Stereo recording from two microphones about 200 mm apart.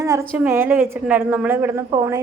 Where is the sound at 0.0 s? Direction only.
15° right (ahead or behind).